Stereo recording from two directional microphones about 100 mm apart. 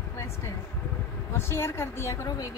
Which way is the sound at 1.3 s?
25° left (ahead or behind).